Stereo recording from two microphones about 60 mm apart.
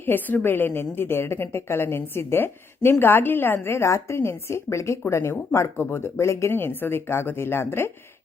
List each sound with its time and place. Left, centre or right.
0.0 s a woman's voice: left
6.5 s a woman's voice: left